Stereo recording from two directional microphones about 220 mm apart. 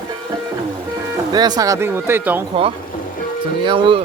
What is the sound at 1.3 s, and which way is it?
Speech, 20° right (ahead or behind).